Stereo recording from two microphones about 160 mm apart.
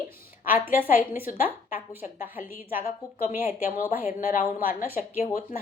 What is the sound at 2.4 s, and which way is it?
Speech, 60° left (ahead or behind).